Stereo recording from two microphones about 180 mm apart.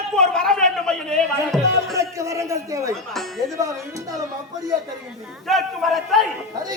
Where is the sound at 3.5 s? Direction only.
15° right (ahead or behind).